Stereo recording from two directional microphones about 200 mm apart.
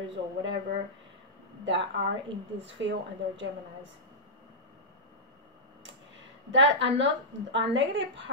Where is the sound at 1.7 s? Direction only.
60° right (ahead or behind).